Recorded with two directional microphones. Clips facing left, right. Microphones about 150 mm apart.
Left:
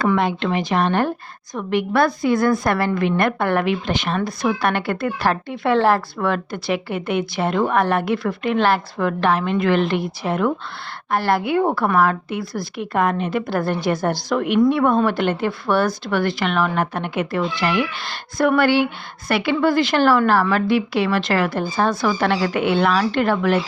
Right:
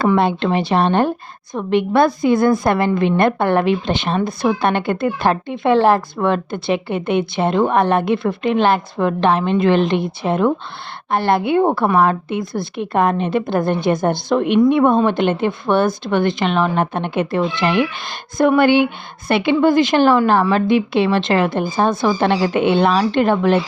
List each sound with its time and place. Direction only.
0.0 s a woman's voice: 30° right (ahead or behind)